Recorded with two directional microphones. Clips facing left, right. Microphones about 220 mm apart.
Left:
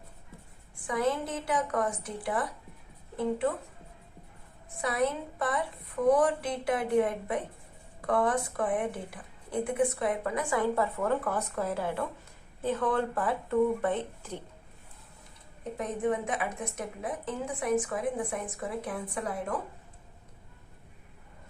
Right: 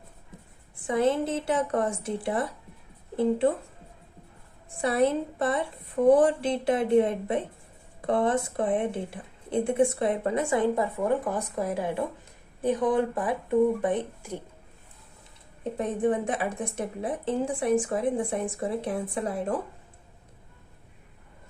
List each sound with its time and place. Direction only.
0.9 s a woman's voice: 25° right (ahead or behind)
4.8 s a woman's voice: 30° right (ahead or behind); by 14.4 s 10° right (ahead or behind)
15.8 s a woman's voice: 30° right (ahead or behind)